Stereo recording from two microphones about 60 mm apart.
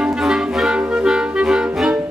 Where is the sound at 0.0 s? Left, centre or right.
Centre.